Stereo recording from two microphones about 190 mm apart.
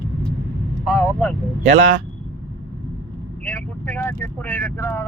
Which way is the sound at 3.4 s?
10° left (ahead or behind).